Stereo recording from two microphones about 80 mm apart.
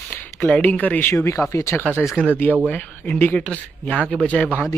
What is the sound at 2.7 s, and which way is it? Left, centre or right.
Speech, centre.